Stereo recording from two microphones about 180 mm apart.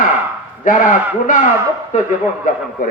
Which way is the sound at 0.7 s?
50° left (ahead or behind).